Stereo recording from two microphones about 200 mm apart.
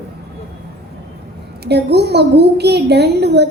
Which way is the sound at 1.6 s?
55° right (ahead or behind).